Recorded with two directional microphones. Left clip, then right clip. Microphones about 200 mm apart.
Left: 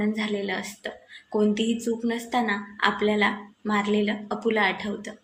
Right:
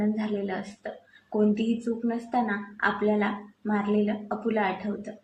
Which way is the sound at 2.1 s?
15° left (ahead or behind).